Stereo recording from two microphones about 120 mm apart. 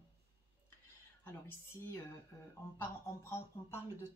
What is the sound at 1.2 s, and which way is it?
A woman's voice, 20° left (ahead or behind).